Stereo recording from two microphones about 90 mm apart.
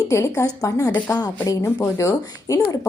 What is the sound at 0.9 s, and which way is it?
Speech, 20° left (ahead or behind).